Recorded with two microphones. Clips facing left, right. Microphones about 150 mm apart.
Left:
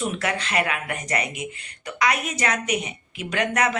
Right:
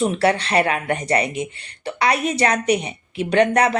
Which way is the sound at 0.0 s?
35° right (ahead or behind).